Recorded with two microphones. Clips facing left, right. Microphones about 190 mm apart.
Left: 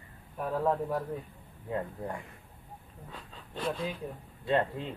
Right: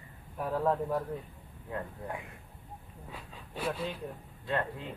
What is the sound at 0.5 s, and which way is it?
Speech, 10° left (ahead or behind).